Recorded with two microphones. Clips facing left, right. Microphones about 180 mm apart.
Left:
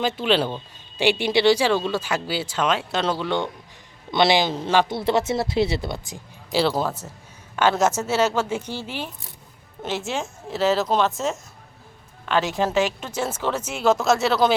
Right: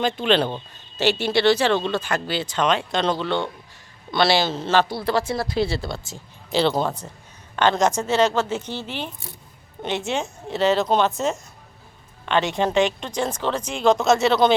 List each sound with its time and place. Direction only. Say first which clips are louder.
0.0 s speech: right 1 dB; 5° left (ahead or behind)
6.5 s speech: right 1 dB; 5° left (ahead or behind)